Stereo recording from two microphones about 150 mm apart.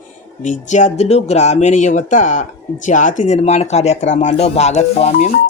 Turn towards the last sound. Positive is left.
turn(degrees=50)  # may be behind; listen again after turning